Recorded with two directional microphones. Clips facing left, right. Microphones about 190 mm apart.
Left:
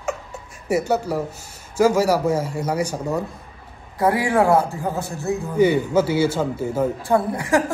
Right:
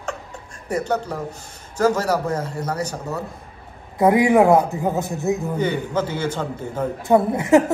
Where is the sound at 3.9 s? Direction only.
20° right (ahead or behind).